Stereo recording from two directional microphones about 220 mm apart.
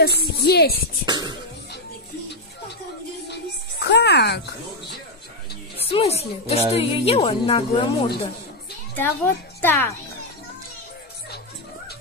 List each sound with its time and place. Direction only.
0.0 s a woman's voice: 45° left (ahead or behind)
1.0 s speech: 20° right (ahead or behind)
3.8 s music: 50° left (ahead or behind)
5.8 s music: 25° left (ahead or behind)
6.7 s a woman's voice: 25° left (ahead or behind)
8.9 s a child's voice: 10° left (ahead or behind)